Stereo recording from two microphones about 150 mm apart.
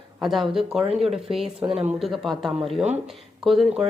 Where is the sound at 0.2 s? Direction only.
Centre (ahead or behind).